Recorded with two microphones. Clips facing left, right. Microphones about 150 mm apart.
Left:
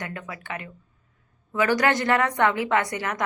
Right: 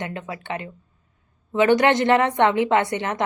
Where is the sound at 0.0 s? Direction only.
25° right (ahead or behind).